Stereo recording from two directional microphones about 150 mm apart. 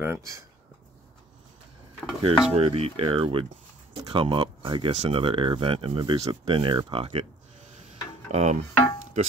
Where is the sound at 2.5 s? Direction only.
40° right (ahead or behind).